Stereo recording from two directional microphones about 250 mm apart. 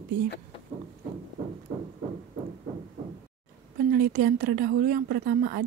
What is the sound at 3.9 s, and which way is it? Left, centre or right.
A woman's voice, right.